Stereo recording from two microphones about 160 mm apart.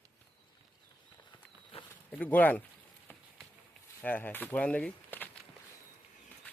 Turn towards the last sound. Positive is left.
turn(degrees=10)  # may be behind; listen again after turning